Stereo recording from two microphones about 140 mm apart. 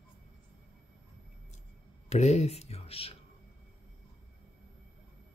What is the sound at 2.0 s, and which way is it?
Speech, 50° left (ahead or behind).